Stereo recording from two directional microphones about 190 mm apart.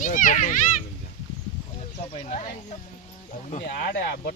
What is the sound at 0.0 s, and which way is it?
Speech, 45° left (ahead or behind).